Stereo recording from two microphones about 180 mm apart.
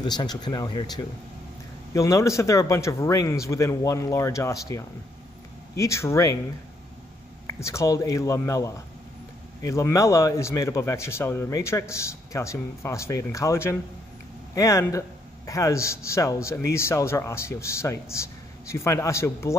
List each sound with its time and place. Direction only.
0.0 s speech: 25° left (ahead or behind)
7.4 s speech: 15° left (ahead or behind)